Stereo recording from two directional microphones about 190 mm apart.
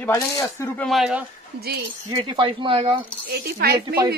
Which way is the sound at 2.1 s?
25° right (ahead or behind).